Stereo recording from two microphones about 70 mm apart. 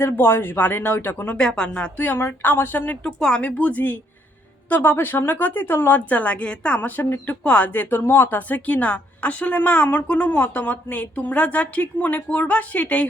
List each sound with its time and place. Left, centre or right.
0.0 s speech: left
1.4 s a woman's voice: centre
2.0 s speech: left
3.0 s speech: centre